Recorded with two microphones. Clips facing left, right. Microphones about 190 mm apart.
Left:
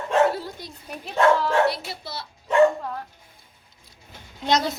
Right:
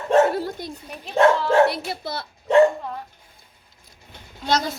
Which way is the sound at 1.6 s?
55° right (ahead or behind).